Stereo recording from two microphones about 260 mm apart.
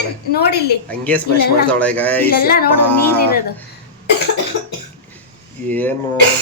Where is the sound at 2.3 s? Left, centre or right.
Left.